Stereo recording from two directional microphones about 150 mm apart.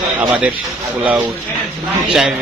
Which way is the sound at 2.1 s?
5° right (ahead or behind).